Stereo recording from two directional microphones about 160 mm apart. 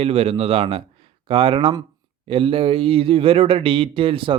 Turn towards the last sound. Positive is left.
turn(degrees=-35)  # may be behind; listen again after turning